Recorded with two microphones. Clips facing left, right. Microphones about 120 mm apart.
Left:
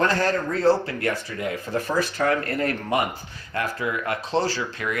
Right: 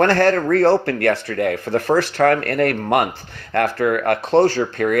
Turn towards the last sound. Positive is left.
turn(degrees=-50)  # may be behind; listen again after turning